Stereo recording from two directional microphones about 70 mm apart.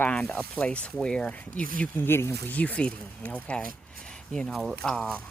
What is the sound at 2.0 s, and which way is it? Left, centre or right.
Speech, left.